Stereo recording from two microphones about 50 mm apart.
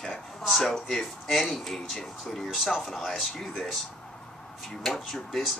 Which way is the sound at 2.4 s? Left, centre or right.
Centre.